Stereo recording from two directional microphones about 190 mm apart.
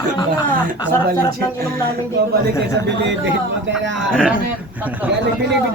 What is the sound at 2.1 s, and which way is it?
Speech, 60° right (ahead or behind).